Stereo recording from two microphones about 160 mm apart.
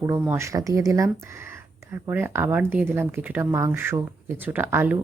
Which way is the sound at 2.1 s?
15° right (ahead or behind).